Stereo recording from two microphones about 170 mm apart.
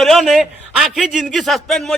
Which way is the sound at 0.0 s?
Centre (ahead or behind).